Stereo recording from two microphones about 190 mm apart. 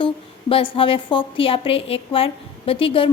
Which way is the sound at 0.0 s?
30° left (ahead or behind).